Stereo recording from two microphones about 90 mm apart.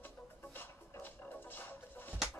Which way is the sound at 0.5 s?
20° left (ahead or behind).